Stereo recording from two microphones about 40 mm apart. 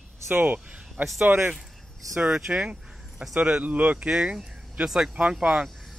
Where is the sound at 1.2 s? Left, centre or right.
Right.